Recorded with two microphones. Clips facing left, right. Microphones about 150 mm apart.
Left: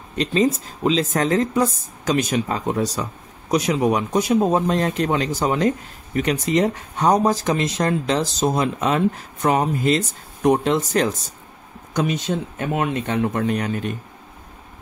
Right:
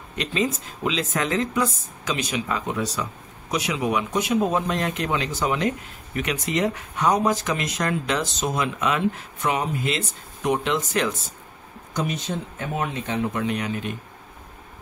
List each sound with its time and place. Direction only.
0.2 s speech: 35° left (ahead or behind)
11.9 s speech: 85° left; by 13.9 s 40° left (ahead or behind)